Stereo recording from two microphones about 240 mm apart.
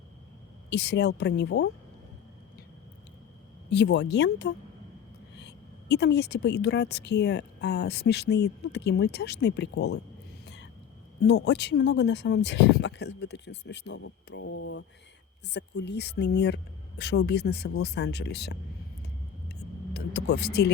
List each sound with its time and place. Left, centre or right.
0.7 s a woman's voice: left
3.7 s a woman's voice: left
10.4 s whispering: left
11.2 s a woman's voice: left
19.5 s vehicle: left